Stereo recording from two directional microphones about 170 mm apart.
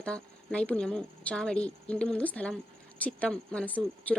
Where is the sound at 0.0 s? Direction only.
5° left (ahead or behind).